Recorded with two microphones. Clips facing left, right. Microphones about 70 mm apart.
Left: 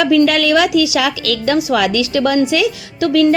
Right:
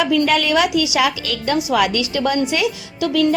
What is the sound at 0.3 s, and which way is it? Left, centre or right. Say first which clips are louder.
A woman's voice: left 3 dB; left.